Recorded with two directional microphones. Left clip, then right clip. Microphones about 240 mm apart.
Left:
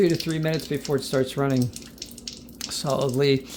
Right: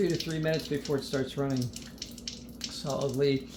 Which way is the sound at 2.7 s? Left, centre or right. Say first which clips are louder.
Left 8 dB; left.